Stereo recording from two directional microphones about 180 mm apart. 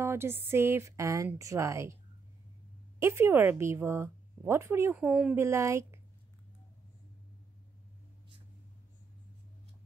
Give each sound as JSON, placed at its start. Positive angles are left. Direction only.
{"t": 0.0, "sound": "a woman's voice", "side_deg": -15}
{"t": 3.0, "sound": "a woman's voice", "side_deg": -15}
{"t": 5.0, "sound": "a woman's voice", "side_deg": -5}